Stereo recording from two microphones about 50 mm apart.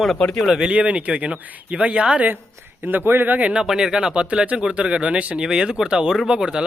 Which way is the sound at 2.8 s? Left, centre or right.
Right.